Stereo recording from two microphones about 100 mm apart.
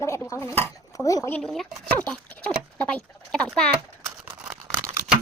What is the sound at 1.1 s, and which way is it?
Speech, 35° left (ahead or behind).